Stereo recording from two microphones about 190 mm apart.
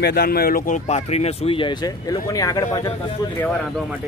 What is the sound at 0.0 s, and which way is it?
Speech, 55° left (ahead or behind).